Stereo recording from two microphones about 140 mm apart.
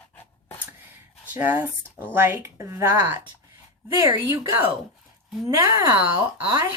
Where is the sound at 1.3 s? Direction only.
15° right (ahead or behind).